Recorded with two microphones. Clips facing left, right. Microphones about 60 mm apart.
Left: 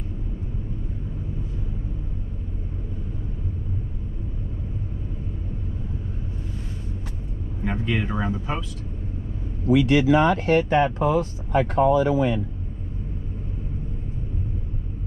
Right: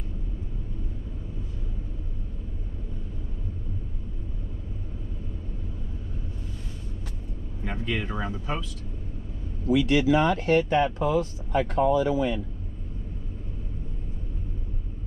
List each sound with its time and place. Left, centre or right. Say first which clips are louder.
7.6 s speech: left 4 dB; centre
9.7 s speech: left 3 dB; left